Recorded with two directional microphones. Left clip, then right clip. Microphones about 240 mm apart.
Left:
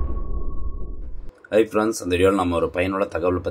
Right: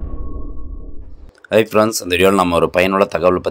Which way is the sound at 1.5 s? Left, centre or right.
Right.